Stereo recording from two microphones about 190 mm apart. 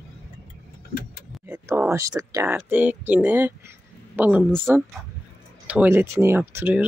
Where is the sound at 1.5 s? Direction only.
10° right (ahead or behind).